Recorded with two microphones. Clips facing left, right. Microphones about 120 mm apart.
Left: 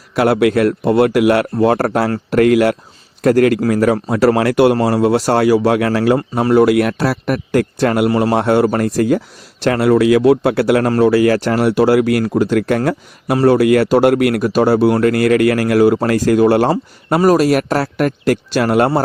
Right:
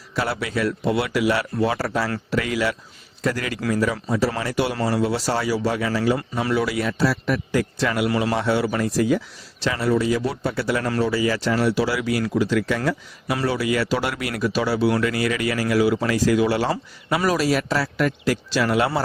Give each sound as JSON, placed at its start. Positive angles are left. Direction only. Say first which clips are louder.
{"t": 0.1, "sound": "speech", "louder": "left 12 dB", "side_deg": 60}
{"t": 6.4, "sound": "speech", "louder": "left 13 dB", "side_deg": 50}